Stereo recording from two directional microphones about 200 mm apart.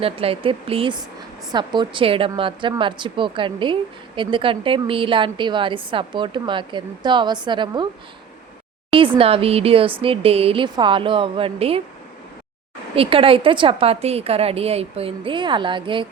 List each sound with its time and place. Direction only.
0.0 s a woman's voice: 30° right (ahead or behind)
9.1 s a woman's voice: 30° right (ahead or behind)
13.0 s a woman's voice: 25° right (ahead or behind)